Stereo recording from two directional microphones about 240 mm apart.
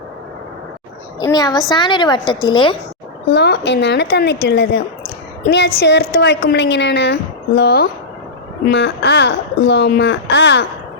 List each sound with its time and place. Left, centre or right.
1.2 s a woman's voice: centre
3.3 s speech: left